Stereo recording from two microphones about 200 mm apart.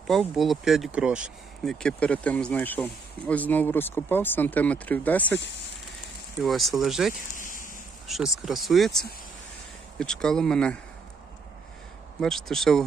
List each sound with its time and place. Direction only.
0.1 s speech: centre (ahead or behind)
6.4 s speech: centre (ahead or behind)
7.3 s a sound: 40° left (ahead or behind)
8.0 s speech: centre (ahead or behind)
12.2 s speech: centre (ahead or behind)